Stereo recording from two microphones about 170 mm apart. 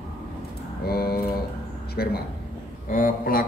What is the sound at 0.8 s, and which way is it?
A man's voice, 65° left (ahead or behind).